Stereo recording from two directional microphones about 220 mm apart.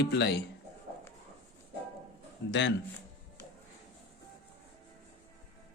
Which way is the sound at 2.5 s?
55° left (ahead or behind).